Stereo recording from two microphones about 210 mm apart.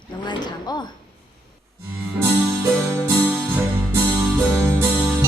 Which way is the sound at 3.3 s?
10° right (ahead or behind).